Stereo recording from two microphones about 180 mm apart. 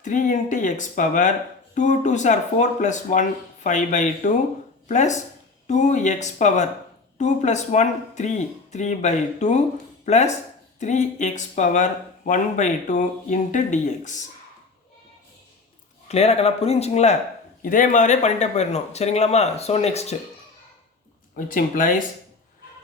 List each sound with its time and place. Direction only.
0.0 s speech: 45° left (ahead or behind)
16.0 s speech: 35° left (ahead or behind)
17.6 s speech: 50° left (ahead or behind)
21.3 s speech: 50° left (ahead or behind)